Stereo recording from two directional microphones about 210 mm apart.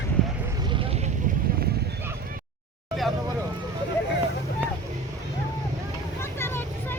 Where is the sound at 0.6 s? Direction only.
25° right (ahead or behind).